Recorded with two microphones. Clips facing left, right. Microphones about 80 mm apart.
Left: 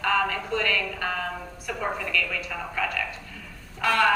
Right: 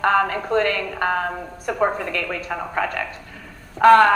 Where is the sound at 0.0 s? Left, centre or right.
Right.